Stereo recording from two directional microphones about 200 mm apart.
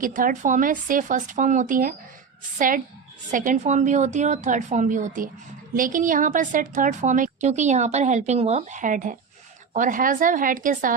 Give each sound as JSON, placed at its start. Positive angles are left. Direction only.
{"t": 0.0, "sound": "a woman's voice", "side_deg": -45}